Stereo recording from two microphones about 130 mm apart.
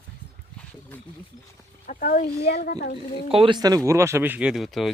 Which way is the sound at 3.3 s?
45° right (ahead or behind).